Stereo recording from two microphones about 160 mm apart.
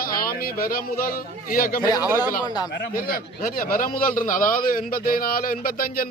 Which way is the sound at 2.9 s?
60° left (ahead or behind).